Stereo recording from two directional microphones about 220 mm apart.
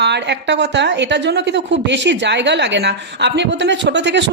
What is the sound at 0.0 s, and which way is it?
A woman's voice, 50° right (ahead or behind).